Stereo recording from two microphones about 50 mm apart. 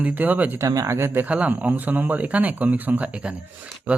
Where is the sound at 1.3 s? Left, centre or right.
Right.